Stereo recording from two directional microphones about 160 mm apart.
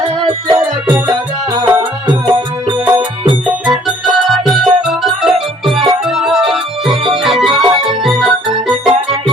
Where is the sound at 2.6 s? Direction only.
30° right (ahead or behind).